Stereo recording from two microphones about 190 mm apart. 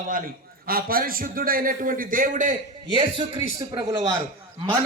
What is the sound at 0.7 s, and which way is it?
A man's voice, 50° right (ahead or behind).